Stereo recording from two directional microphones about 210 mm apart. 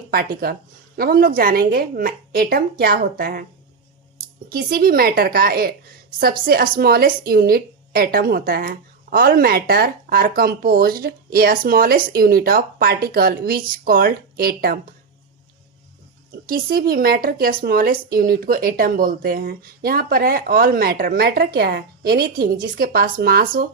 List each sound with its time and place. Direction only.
0.9 s a woman's voice: 45° right (ahead or behind)
4.4 s a woman's voice: 45° right (ahead or behind)
16.3 s a woman's voice: 45° right (ahead or behind)